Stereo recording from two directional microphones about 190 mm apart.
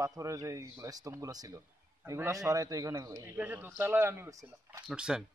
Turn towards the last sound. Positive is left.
turn(degrees=-5)  # may be behind; listen again after turning